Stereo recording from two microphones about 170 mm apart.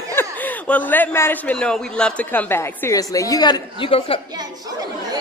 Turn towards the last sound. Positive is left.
turn(degrees=-25)  # may be behind; listen again after turning